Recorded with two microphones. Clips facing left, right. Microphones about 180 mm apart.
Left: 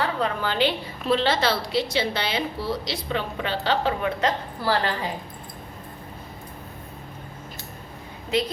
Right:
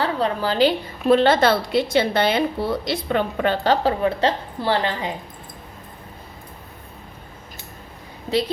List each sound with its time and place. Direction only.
0.0 s a woman's voice: 35° right (ahead or behind)
1.0 s a woman's voice: 50° right (ahead or behind); by 5.1 s 20° right (ahead or behind)